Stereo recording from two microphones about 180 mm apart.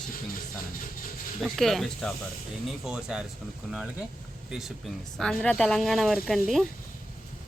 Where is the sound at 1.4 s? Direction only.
Centre (ahead or behind).